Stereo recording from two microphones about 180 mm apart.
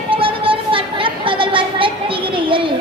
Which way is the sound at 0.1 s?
30° right (ahead or behind).